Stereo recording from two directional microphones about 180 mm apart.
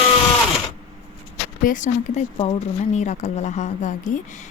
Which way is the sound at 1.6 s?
45° left (ahead or behind).